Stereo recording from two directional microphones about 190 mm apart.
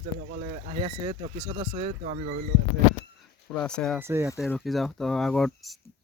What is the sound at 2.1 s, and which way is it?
Speech, 40° right (ahead or behind).